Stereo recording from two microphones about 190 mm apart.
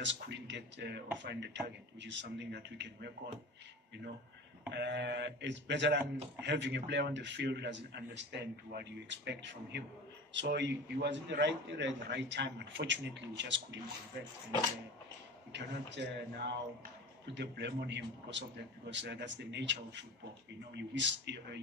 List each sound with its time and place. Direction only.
0.0 s a man's voice: 70° right (ahead or behind)
4.6 s a man's voice: 65° right (ahead or behind)
15.5 s a man's voice: 65° right (ahead or behind)